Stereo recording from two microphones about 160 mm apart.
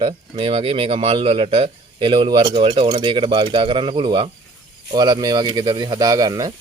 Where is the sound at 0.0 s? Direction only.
35° right (ahead or behind).